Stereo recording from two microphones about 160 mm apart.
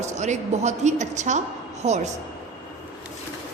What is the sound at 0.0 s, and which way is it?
A woman's voice, 45° right (ahead or behind).